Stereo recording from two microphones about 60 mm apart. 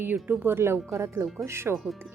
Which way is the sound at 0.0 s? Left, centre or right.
Right.